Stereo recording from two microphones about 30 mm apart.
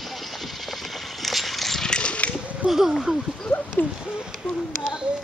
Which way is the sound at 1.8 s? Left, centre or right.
Left.